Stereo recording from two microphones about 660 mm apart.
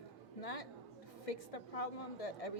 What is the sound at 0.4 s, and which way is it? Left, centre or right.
Speech, left.